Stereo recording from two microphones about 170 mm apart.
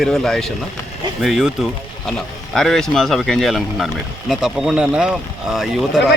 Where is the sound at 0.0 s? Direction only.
5° left (ahead or behind).